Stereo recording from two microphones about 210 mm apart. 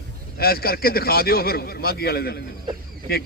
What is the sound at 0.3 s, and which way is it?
A man's voice, 45° left (ahead or behind).